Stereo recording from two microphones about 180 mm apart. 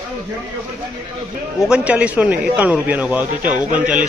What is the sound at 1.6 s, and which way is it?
A man's voice, 5° right (ahead or behind).